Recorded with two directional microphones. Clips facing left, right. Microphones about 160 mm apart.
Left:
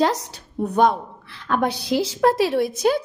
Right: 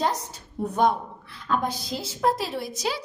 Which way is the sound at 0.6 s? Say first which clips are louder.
Left 4 dB; 75° left (ahead or behind).